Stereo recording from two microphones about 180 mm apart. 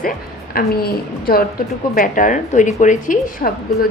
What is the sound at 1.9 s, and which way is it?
A woman's voice, 45° left (ahead or behind).